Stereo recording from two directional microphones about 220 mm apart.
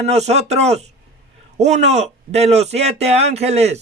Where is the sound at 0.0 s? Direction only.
30° right (ahead or behind).